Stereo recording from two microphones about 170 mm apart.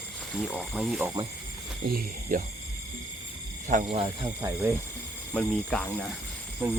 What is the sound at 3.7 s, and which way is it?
Speech, 45° right (ahead or behind).